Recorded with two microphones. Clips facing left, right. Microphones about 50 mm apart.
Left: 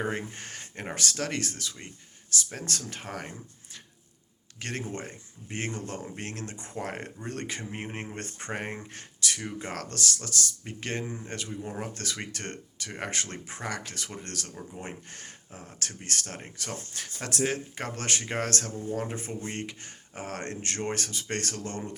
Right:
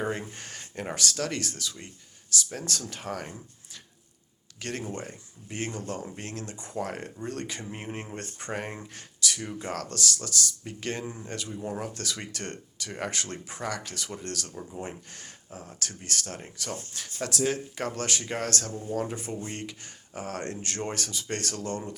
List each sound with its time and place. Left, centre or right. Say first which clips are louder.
0.1 s speech: even; left